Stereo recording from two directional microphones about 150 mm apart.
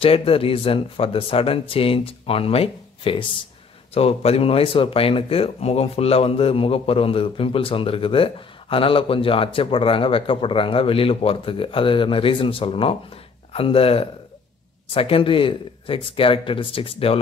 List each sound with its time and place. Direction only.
0.0 s speech: 40° left (ahead or behind)